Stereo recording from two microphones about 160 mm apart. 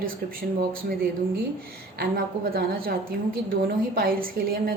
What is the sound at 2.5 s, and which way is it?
Speech, 70° right (ahead or behind).